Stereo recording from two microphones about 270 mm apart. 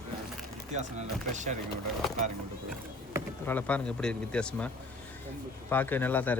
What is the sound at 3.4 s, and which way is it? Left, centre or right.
Speech, centre.